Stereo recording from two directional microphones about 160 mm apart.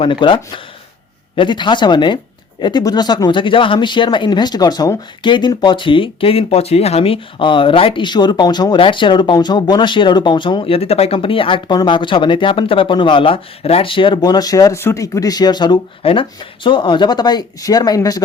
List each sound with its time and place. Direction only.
0.0 s speech: 30° left (ahead or behind)
1.4 s speech: 30° left (ahead or behind)